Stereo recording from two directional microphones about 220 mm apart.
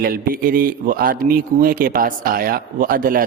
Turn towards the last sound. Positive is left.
turn(degrees=-40)  # may be behind; listen again after turning